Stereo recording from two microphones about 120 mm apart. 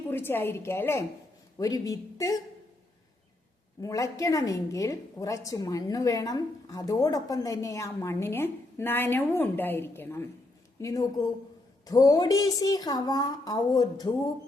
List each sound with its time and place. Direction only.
0.1 s a woman's voice: 20° left (ahead or behind)
1.5 s a woman's voice: 30° left (ahead or behind)
3.8 s a woman's voice: 30° left (ahead or behind)